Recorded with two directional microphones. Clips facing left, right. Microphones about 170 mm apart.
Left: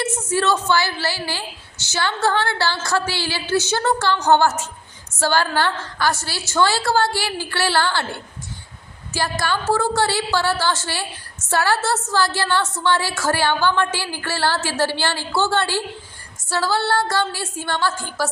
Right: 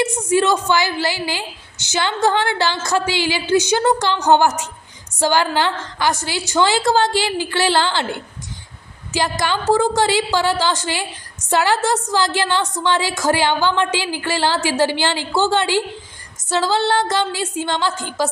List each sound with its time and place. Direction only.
0.0 s a woman's voice: 15° right (ahead or behind)
9.1 s a woman's voice: 20° right (ahead or behind)